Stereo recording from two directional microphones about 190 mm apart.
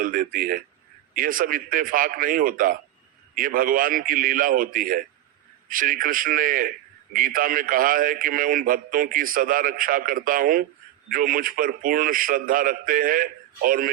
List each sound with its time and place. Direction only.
0.0 s a man's voice: 50° right (ahead or behind)